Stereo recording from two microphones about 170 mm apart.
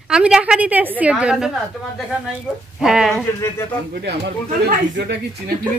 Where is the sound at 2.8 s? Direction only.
Centre (ahead or behind).